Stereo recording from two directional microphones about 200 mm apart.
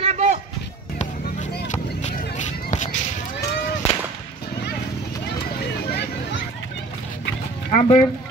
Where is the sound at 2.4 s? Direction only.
35° left (ahead or behind).